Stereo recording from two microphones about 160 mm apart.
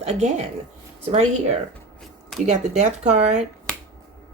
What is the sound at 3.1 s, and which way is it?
Speech, 45° right (ahead or behind).